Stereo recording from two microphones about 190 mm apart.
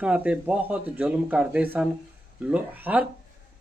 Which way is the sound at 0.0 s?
5° right (ahead or behind).